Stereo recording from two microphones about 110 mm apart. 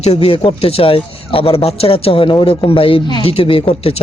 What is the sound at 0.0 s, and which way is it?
Speech, 70° left (ahead or behind).